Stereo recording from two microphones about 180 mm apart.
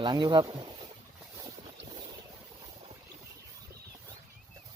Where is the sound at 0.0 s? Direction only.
25° right (ahead or behind).